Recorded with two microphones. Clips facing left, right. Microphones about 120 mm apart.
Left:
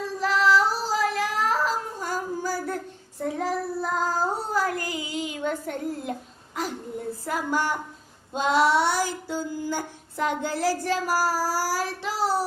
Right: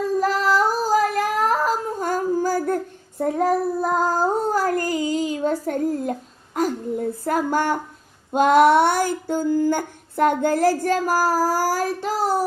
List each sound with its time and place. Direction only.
0.2 s female singing: 45° right (ahead or behind)
6.5 s a sound: 45° right (ahead or behind)
7.3 s female singing: 45° right (ahead or behind)